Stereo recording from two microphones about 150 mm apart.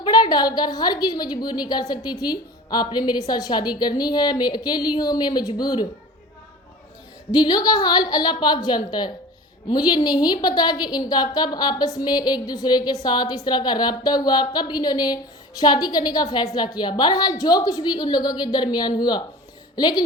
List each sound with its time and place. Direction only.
0.0 s a woman's voice: 30° left (ahead or behind)
7.3 s a woman's voice: 30° left (ahead or behind)